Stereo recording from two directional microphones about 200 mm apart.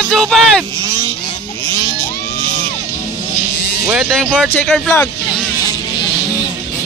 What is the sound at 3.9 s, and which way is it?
Speech, 5° right (ahead or behind).